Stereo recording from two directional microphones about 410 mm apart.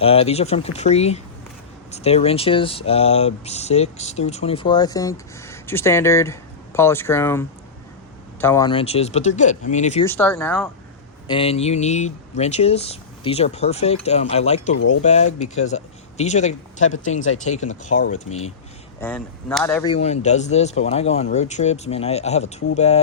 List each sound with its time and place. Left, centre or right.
0.0 s speech: centre
10.1 s speech: centre
18.9 s speech: centre